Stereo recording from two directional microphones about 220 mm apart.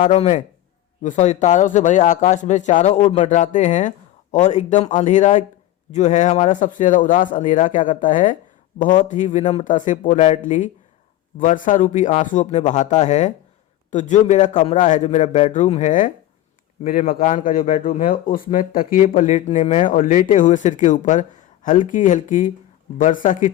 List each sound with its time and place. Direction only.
0.0 s speech: 30° left (ahead or behind)